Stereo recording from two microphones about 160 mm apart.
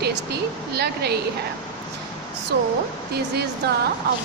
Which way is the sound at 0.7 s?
85° right.